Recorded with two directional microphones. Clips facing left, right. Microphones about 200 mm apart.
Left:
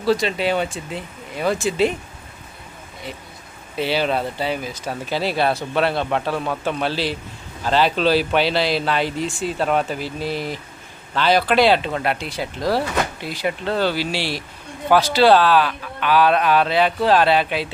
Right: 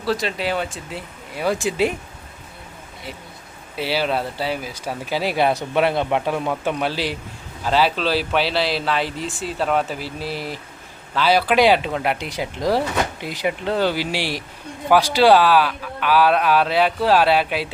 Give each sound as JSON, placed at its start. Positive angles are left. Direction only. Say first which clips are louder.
{"t": 0.0, "sound": "speech", "louder": "left 4 dB", "side_deg": 0}
{"t": 3.8, "sound": "speech", "louder": "left 1 dB", "side_deg": -5}